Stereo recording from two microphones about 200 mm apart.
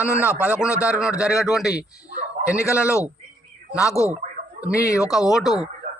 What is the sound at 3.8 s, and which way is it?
Speech, 15° left (ahead or behind).